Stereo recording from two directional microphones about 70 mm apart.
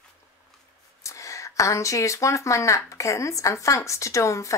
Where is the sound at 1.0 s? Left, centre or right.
Left.